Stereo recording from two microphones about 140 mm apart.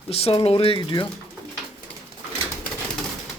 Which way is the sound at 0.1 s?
45° left (ahead or behind).